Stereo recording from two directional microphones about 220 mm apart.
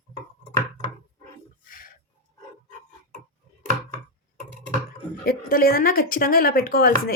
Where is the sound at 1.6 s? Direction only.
40° left (ahead or behind).